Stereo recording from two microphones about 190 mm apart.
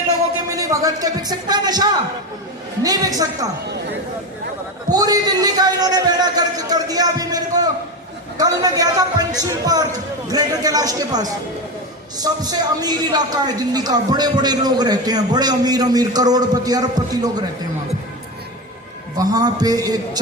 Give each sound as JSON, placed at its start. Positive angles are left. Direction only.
{"t": 0.5, "sound": "a man's voice", "side_deg": -20}
{"t": 4.9, "sound": "a man's voice", "side_deg": -20}
{"t": 19.1, "sound": "a man's voice", "side_deg": -20}